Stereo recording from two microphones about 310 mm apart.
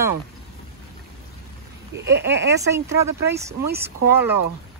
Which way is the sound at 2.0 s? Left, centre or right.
Right.